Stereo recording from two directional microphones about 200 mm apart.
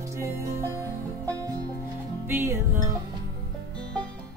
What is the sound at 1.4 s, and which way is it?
Music, 15° right (ahead or behind).